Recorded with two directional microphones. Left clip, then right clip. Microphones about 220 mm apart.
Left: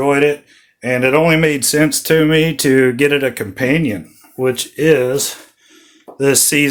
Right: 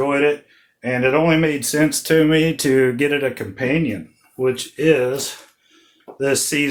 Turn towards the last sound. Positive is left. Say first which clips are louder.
# left 5 dB
turn(degrees=50)  # may be behind; listen again after turning